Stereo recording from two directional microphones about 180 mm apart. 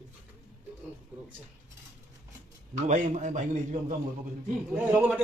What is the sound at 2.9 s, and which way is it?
Speech, 45° right (ahead or behind).